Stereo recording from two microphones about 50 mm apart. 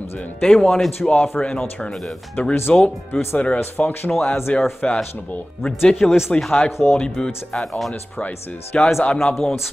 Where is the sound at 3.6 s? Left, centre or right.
Left.